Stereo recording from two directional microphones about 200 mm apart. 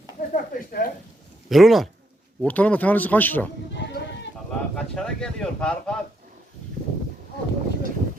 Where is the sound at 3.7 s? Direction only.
60° left (ahead or behind).